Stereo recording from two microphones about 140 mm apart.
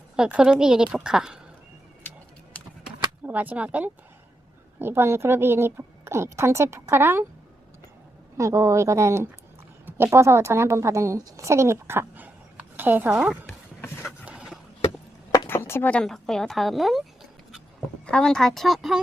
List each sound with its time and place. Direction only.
0.2 s a woman's voice: 5° right (ahead or behind)
3.2 s a woman's voice: 10° right (ahead or behind)
8.4 s a woman's voice: 20° right (ahead or behind)
13.8 s vehicle: 15° left (ahead or behind)
14.3 s a sound: 5° right (ahead or behind)
15.4 s speech: 15° left (ahead or behind); by 17.0 s centre (ahead or behind)
18.0 s a woman's voice: 5° left (ahead or behind)